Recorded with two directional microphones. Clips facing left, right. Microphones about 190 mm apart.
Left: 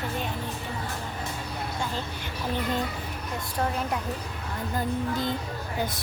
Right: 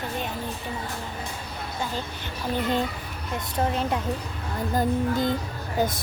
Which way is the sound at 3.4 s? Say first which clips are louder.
Right 3 dB; 20° right (ahead or behind).